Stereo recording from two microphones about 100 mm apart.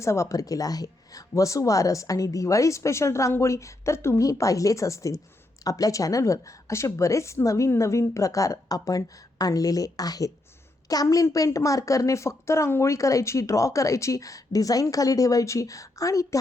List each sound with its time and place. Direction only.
0.0 s a woman's voice: 30° left (ahead or behind)